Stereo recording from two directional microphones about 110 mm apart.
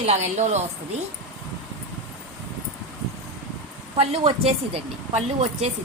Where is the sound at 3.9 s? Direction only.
65° right (ahead or behind).